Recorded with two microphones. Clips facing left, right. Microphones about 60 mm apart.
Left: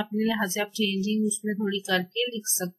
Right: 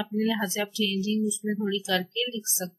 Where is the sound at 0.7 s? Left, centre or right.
Left.